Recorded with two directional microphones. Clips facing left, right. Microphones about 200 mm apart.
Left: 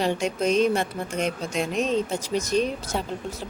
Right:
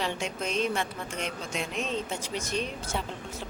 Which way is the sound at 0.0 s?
40° left (ahead or behind).